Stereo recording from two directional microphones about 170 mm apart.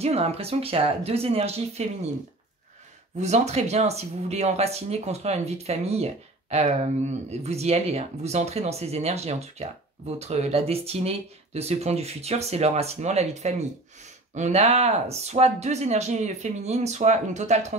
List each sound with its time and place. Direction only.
0.0 s speech: 35° right (ahead or behind)
3.2 s speech: 40° right (ahead or behind)